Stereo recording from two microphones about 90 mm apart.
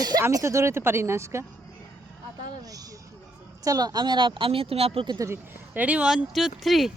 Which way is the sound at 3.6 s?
45° right (ahead or behind).